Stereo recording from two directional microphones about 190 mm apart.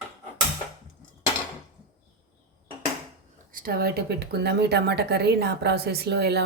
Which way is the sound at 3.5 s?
50° right (ahead or behind).